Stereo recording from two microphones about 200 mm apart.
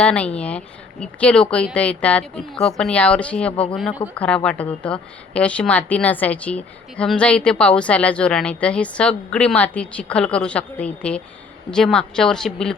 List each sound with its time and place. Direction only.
0.0 s a woman's voice: 5° left (ahead or behind)
3.5 s speech: 25° left (ahead or behind)
3.8 s a woman's voice: centre (ahead or behind)